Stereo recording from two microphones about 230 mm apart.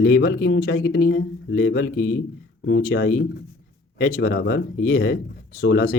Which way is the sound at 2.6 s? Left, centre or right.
Left.